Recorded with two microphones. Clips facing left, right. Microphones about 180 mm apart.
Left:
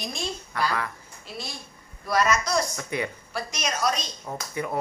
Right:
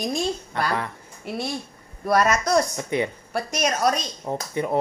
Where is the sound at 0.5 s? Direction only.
25° right (ahead or behind).